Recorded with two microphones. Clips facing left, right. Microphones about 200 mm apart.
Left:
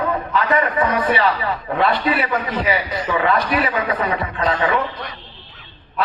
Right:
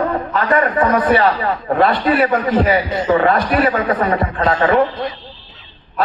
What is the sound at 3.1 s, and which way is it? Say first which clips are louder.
Speech: right 4 dB; 45° right (ahead or behind).